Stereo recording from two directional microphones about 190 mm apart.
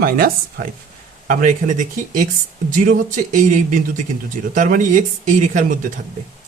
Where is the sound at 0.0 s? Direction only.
50° right (ahead or behind).